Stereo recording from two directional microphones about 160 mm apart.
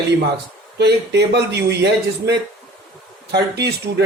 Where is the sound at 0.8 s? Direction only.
90° right.